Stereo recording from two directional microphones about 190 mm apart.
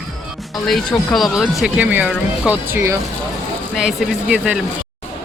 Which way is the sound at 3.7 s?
Centre (ahead or behind).